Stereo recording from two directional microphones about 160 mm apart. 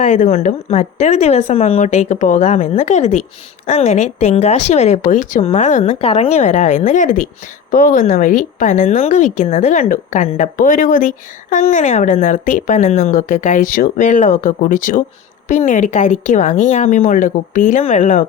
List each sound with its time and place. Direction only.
0.0 s a woman's voice: 50° left (ahead or behind)